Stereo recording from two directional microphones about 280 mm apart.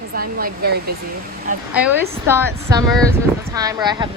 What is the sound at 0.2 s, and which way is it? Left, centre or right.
Speech, right.